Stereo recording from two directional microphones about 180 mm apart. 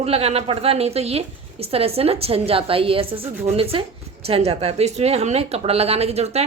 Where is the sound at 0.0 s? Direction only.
35° right (ahead or behind).